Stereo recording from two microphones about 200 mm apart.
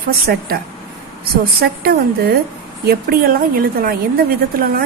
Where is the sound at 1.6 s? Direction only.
50° right (ahead or behind).